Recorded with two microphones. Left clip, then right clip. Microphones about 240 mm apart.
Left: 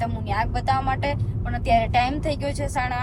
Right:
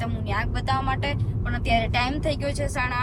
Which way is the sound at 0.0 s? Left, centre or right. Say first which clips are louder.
Left 3 dB; centre.